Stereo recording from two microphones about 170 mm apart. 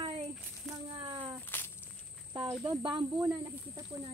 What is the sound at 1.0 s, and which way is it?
Speech, 30° right (ahead or behind).